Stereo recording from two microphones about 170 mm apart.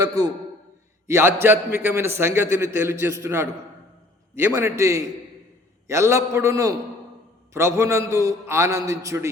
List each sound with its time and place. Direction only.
1.0 s a man's voice: 15° right (ahead or behind)